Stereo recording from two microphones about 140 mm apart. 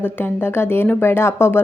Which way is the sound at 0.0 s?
15° left (ahead or behind).